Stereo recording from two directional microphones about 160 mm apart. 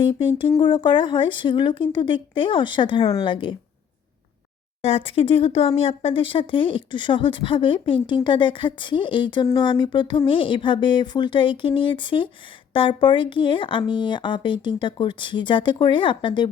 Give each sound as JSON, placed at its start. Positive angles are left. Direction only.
{"t": 0.0, "sound": "speech", "side_deg": 35}
{"t": 4.8, "sound": "speech", "side_deg": 35}